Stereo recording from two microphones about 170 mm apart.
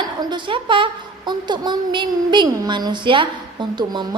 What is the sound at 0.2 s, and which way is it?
A woman's voice, 25° right (ahead or behind).